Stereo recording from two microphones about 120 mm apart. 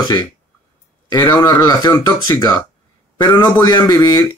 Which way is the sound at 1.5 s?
30° left (ahead or behind).